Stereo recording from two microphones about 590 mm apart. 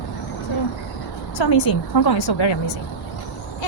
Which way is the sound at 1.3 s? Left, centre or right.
Left.